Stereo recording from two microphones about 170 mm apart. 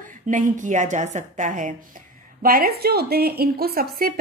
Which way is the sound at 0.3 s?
50° right (ahead or behind).